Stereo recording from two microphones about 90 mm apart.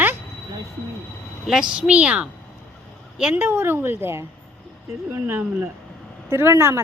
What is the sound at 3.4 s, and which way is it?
A woman's voice, 25° right (ahead or behind).